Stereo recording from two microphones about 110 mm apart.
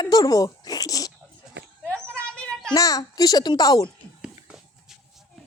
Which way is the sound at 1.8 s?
10° left (ahead or behind).